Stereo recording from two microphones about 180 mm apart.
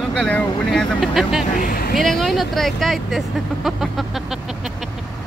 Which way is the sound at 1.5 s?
50° left (ahead or behind).